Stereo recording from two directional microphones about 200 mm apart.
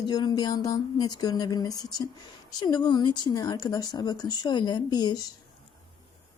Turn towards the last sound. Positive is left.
turn(degrees=20)  # may be behind; listen again after turning